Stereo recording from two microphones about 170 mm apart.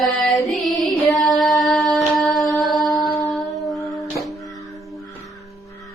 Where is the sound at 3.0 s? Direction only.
25° left (ahead or behind).